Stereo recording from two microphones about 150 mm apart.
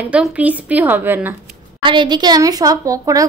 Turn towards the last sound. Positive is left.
turn(degrees=-20)  # may be behind; listen again after turning